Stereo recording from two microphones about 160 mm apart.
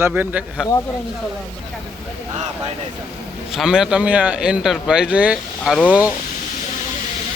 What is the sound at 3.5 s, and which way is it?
Speech, 5° right (ahead or behind).